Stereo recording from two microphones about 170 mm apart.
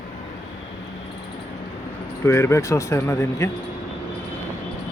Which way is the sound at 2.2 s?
15° left (ahead or behind).